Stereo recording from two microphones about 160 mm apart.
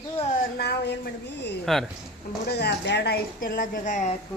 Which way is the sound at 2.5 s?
90° left.